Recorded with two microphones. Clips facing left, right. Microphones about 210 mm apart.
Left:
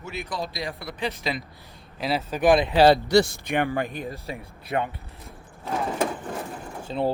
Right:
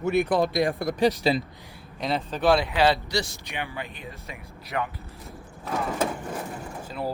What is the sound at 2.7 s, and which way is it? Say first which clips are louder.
Speech: left 6 dB; 40° left (ahead or behind).